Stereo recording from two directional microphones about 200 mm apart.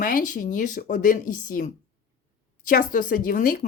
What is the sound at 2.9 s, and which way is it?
Speech, 40° left (ahead or behind).